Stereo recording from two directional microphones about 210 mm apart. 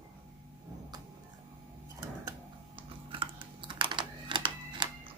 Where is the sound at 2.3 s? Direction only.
25° right (ahead or behind).